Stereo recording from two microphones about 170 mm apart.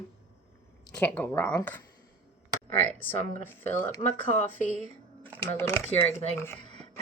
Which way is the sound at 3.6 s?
15° left (ahead or behind).